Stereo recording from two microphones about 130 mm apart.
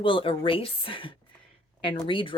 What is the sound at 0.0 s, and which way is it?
Speech, 40° left (ahead or behind).